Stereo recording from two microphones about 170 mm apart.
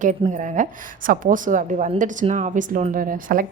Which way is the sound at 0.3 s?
50° right (ahead or behind).